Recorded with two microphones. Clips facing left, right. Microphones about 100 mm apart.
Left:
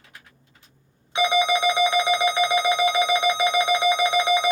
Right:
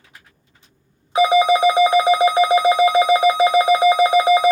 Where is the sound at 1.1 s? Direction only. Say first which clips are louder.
Right 7 dB; 40° right (ahead or behind).